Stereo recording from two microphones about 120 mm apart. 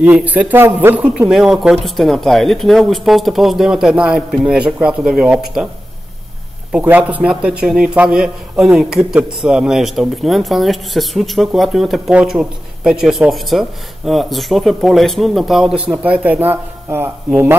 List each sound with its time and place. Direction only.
0.0 s a man's voice: 15° right (ahead or behind)
6.7 s a man's voice: 10° right (ahead or behind)